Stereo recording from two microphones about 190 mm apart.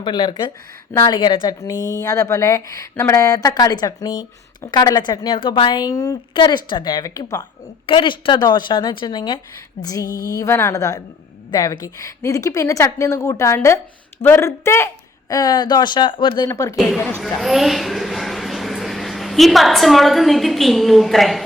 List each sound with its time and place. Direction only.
0.0 s a woman's voice: 25° left (ahead or behind)
16.7 s speech: 5° left (ahead or behind)